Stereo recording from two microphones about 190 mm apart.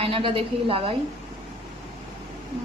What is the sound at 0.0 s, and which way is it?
Speech, 30° right (ahead or behind).